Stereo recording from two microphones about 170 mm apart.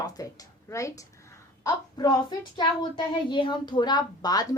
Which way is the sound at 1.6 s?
20° left (ahead or behind).